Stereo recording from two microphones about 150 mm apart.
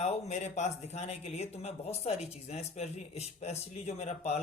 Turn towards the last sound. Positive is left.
turn(degrees=45)  # may be behind; listen again after turning